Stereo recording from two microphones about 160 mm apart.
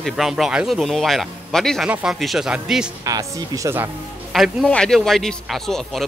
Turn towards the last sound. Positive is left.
turn(degrees=0)  # may be behind; listen again after turning